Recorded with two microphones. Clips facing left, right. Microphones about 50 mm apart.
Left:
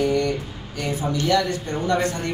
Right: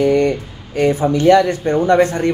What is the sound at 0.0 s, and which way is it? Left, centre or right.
A man's voice, right.